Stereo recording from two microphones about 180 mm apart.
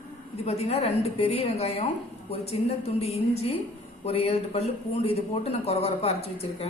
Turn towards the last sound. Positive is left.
turn(degrees=35)  # may be behind; listen again after turning